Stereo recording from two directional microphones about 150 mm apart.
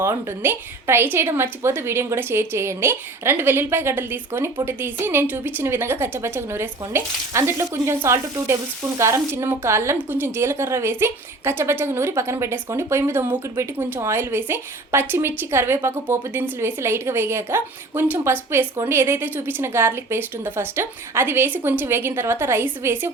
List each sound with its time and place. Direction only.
0.0 s a woman's voice: 15° right (ahead or behind)